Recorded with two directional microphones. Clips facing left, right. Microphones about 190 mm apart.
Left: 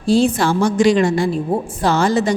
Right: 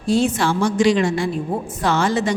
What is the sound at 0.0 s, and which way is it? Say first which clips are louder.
A woman's voice: left 3 dB; 35° left (ahead or behind).